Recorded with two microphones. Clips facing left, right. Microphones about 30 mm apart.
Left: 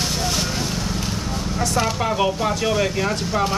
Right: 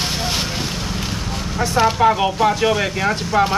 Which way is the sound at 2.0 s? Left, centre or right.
Centre.